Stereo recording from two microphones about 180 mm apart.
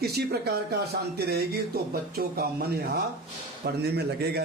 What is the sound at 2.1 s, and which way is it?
A man's voice, 55° right (ahead or behind).